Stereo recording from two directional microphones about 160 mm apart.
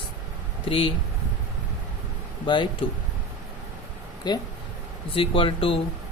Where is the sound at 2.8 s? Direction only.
35° left (ahead or behind).